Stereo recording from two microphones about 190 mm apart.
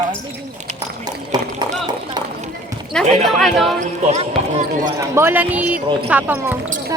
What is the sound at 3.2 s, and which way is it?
Speech, centre (ahead or behind).